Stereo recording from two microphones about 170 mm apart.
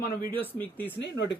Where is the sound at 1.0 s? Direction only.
90° left.